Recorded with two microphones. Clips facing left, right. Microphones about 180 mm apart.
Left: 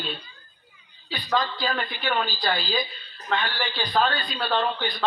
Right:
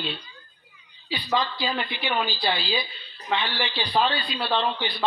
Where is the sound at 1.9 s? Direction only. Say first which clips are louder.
Even; 45° left (ahead or behind).